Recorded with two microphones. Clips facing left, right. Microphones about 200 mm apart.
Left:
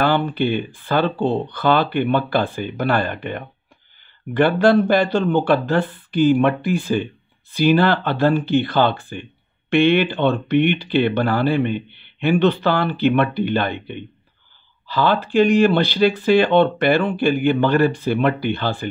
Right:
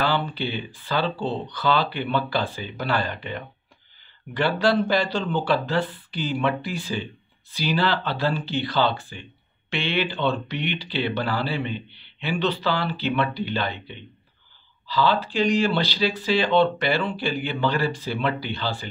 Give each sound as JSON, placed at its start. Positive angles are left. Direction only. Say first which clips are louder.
{"t": 0.0, "sound": "speech", "louder": "left 6 dB", "side_deg": 55}